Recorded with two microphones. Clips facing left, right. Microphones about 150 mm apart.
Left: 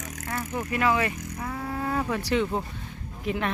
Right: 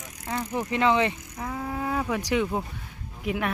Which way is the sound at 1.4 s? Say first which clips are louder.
Right 1 dB; 10° right (ahead or behind).